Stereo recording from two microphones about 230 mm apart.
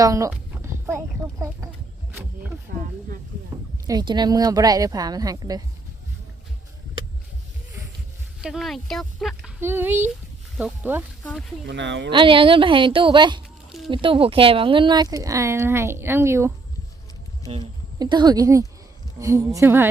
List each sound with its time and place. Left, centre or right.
0.0 s speech: centre
0.6 s clip-clop: centre
2.7 s speech: right
3.5 s a sound: centre
3.8 s speech: centre
8.4 s speech: centre
9.6 s speech: centre
11.6 s speech: right
12.1 s a woman's voice: right
13.7 s a sound: centre
13.9 s speech: right
17.5 s speech: centre